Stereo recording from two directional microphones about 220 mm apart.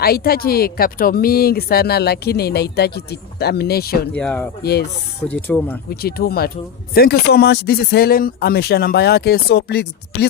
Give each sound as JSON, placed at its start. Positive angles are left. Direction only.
{"t": 0.0, "sound": "speech", "side_deg": 45}
{"t": 4.1, "sound": "speech", "side_deg": 5}
{"t": 4.6, "sound": "speech", "side_deg": 45}
{"t": 5.3, "sound": "speech", "side_deg": 10}
{"t": 5.9, "sound": "speech", "side_deg": 45}